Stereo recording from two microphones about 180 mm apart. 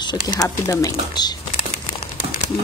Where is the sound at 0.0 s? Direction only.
20° left (ahead or behind).